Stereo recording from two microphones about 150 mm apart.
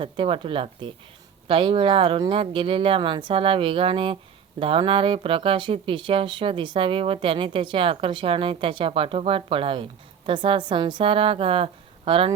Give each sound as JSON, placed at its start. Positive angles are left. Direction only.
{"t": 0.0, "sound": "speech", "side_deg": -35}